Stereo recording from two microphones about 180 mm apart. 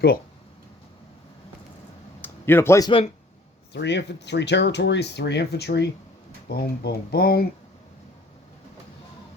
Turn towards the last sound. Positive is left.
turn(degrees=60)  # may be behind; listen again after turning